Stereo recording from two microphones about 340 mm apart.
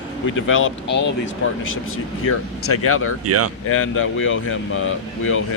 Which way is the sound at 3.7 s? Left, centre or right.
Left.